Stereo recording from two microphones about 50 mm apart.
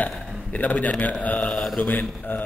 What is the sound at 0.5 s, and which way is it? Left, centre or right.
A man's voice, left.